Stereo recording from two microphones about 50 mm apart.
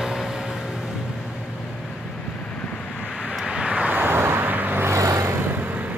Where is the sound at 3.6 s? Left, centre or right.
Centre.